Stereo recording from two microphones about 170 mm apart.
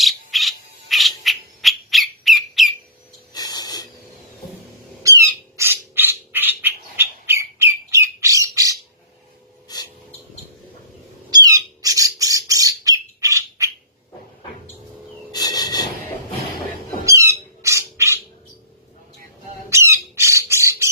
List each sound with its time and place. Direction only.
0.0 s bird: centre (ahead or behind)
3.3 s a sound: 25° left (ahead or behind)
5.0 s squawk: 20° right (ahead or behind)
9.7 s a sound: 20° left (ahead or behind)
11.3 s squawk: 20° right (ahead or behind)
15.3 s rub: 25° left (ahead or behind)
17.1 s squawk: 20° right (ahead or behind)
19.7 s squawk: 15° right (ahead or behind)